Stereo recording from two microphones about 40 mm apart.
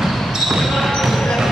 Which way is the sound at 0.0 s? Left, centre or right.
Centre.